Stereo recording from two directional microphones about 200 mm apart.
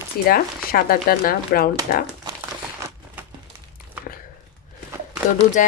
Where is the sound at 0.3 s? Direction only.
45° left (ahead or behind).